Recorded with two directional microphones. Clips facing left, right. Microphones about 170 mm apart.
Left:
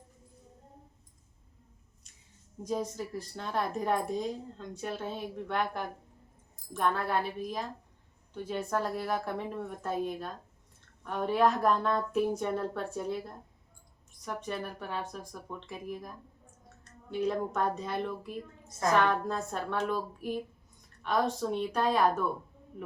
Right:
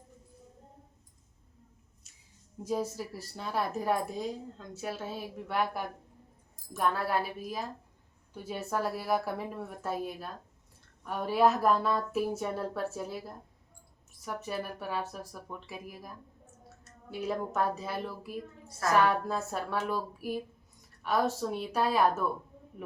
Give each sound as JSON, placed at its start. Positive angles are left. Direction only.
{"t": 2.6, "sound": "a woman's voice", "side_deg": -5}
{"t": 17.1, "sound": "a woman's voice", "side_deg": -5}